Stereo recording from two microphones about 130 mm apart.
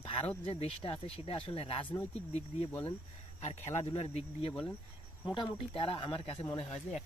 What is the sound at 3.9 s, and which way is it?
Speech, 50° left (ahead or behind).